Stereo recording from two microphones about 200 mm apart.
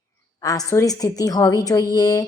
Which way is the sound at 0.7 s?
15° left (ahead or behind).